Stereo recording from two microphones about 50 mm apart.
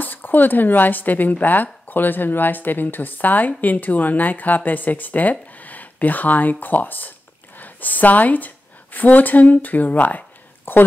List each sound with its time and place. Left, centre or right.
0.0 s a woman's voice: left